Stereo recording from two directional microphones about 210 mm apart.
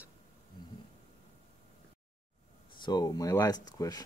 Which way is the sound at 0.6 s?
20° left (ahead or behind).